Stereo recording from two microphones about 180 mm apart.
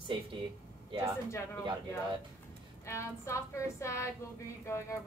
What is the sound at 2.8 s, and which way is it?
A woman's voice, 15° left (ahead or behind).